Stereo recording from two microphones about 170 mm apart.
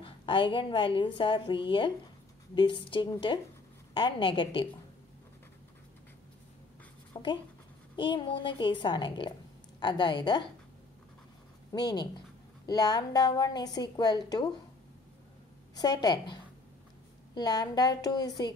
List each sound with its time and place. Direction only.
0.0 s a woman's voice: 30° left (ahead or behind)
7.2 s a woman's voice: 25° left (ahead or behind)
11.7 s a woman's voice: 25° left (ahead or behind)
15.7 s a woman's voice: 25° left (ahead or behind)